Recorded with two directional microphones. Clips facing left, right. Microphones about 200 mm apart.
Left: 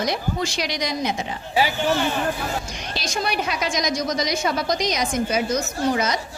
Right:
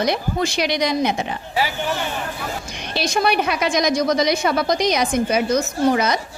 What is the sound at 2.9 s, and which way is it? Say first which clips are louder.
A woman's voice: right 6 dB; 60° right (ahead or behind).